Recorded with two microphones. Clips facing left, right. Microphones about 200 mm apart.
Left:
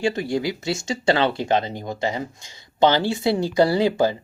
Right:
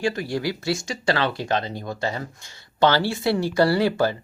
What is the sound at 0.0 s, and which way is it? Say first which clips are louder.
Speech: left 2 dB; 20° left (ahead or behind).